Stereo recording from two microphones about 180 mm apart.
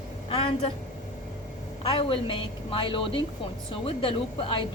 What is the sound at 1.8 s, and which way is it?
A woman's voice, 30° left (ahead or behind).